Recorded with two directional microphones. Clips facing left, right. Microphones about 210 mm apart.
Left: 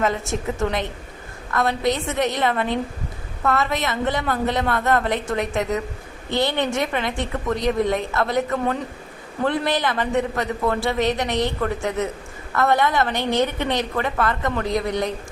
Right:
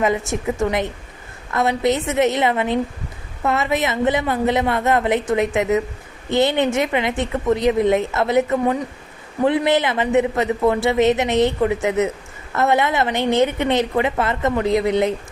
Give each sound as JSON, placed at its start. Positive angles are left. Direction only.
{"t": 0.0, "sound": "a woman's voice", "side_deg": -15}